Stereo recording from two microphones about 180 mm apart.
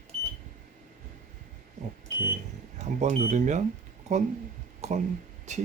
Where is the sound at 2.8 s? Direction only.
40° right (ahead or behind).